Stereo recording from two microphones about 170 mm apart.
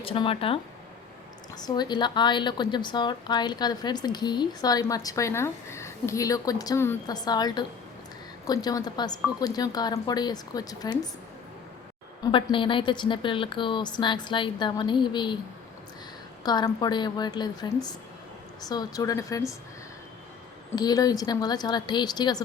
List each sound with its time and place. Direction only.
0.0 s a woman's voice: 35° left (ahead or behind)
12.2 s a woman's voice: 30° left (ahead or behind)
16.4 s a woman's voice: 25° left (ahead or behind)
20.7 s a woman's voice: 20° left (ahead or behind)